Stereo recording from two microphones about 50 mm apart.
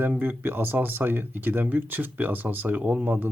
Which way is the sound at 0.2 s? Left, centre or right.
Right.